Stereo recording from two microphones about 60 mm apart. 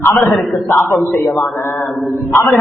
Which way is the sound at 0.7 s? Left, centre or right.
Left.